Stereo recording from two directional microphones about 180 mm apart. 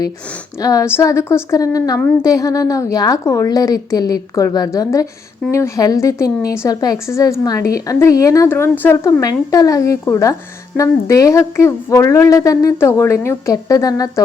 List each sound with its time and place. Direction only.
0.6 s a woman's voice: 20° left (ahead or behind)